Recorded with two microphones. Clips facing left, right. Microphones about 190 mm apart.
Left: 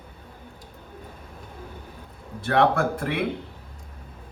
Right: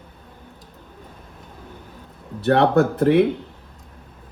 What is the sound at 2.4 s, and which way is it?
Speech, 40° right (ahead or behind).